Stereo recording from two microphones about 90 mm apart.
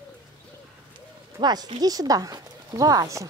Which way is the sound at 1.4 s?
50° right (ahead or behind).